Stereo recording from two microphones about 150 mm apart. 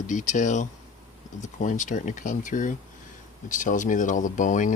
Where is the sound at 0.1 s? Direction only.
55° left (ahead or behind).